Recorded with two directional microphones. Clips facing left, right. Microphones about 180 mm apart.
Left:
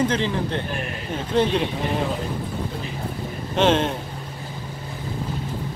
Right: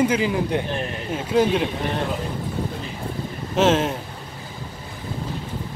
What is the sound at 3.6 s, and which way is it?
Speech, 5° right (ahead or behind).